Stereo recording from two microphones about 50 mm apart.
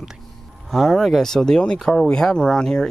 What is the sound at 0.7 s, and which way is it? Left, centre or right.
Speech, centre.